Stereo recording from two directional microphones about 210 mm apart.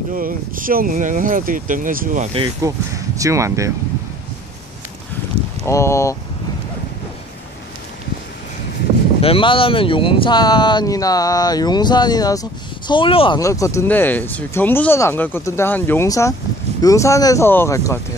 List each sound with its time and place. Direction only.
0.1 s speech: 40° right (ahead or behind)
2.3 s speech: 20° right (ahead or behind)
5.7 s speech: 15° left (ahead or behind)
9.2 s speech: 25° left (ahead or behind)
13.4 s speech: 15° left (ahead or behind)